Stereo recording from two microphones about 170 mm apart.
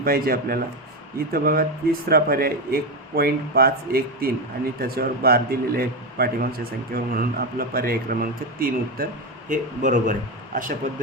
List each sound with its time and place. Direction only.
0.0 s a man's voice: 60° right (ahead or behind)